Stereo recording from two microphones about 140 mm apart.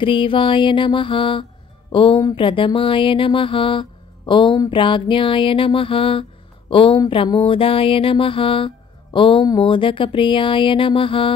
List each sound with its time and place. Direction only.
0.0 s mantra: 35° left (ahead or behind)
6.7 s a woman's voice: 40° left (ahead or behind)
7.2 s mantra: 40° left (ahead or behind)